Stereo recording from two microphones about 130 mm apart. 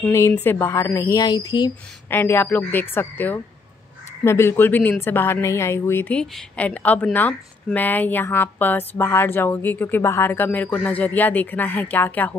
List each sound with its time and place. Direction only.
0.0 s speech: 15° left (ahead or behind); by 1.7 s 30° left (ahead or behind)
2.0 s speech: 15° left (ahead or behind)